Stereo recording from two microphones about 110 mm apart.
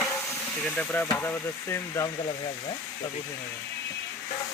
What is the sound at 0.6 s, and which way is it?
Speech, 10° left (ahead or behind).